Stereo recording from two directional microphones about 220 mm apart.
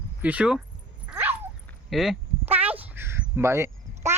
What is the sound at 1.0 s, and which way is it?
Dog, 10° right (ahead or behind).